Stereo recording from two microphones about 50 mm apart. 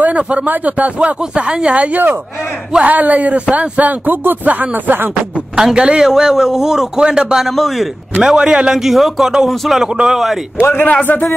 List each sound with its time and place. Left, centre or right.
0.0 s speech: right
2.8 s speech: right
5.6 s a man's voice: centre
7.5 s speech: centre
8.2 s a man's voice: centre
10.6 s a man's voice: left
11.0 s speech: left